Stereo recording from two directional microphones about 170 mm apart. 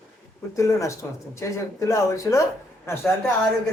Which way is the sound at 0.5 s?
20° left (ahead or behind).